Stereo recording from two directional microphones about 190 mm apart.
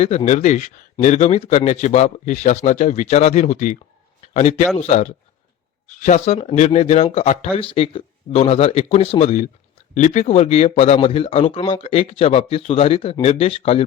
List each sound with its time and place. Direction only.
0.3 s a man's voice: 40° left (ahead or behind)